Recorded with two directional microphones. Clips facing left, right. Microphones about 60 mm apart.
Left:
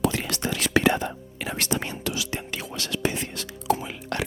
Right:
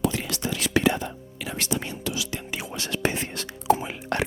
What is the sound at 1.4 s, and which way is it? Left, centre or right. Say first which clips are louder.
Whispering: left 1 dB; left.